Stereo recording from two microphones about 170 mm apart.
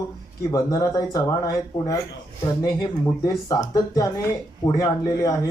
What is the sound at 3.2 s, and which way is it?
Speech, 20° left (ahead or behind).